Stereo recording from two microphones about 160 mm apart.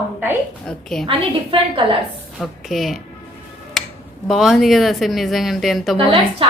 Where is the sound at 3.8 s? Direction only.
5° left (ahead or behind).